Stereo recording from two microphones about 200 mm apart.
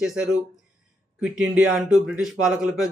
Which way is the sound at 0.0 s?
5° right (ahead or behind).